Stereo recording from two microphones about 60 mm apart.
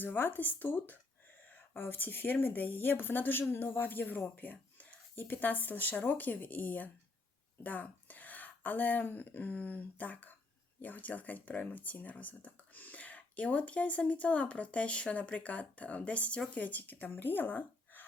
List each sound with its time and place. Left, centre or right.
0.0 s speech: left